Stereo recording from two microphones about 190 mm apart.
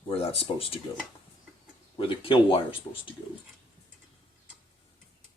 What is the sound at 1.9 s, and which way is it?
Speech, 25° left (ahead or behind).